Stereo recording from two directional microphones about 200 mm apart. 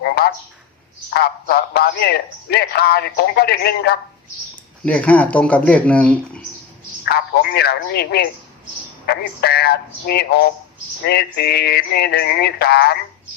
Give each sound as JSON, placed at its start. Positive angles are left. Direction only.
{"t": 0.0, "sound": "a sound", "side_deg": 50}
{"t": 1.1, "sound": "a man's voice", "side_deg": 55}
{"t": 4.9, "sound": "speech", "side_deg": 5}
{"t": 7.0, "sound": "a man's voice", "side_deg": 50}